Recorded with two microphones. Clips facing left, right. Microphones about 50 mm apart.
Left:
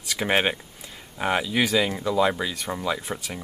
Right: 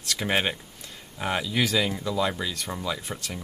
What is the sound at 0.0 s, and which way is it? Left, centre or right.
Speech, centre.